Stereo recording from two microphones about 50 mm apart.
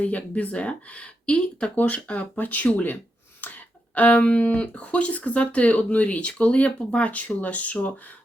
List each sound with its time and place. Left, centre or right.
0.0 s speech: left
1.7 s speech: left